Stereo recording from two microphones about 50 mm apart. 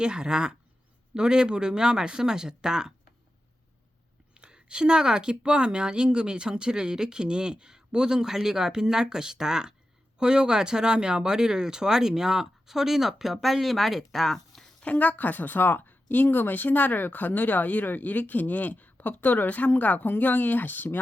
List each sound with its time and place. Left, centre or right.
0.0 s a woman's voice: centre
4.4 s a woman's voice: centre
14.8 s speech: left